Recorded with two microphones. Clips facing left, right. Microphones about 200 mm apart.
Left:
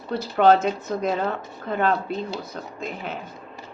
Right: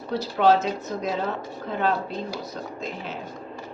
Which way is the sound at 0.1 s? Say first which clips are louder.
Left 2 dB; 55° left (ahead or behind).